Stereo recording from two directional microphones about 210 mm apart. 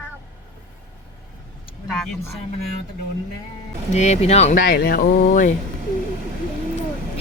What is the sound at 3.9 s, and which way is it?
Speech, 35° left (ahead or behind).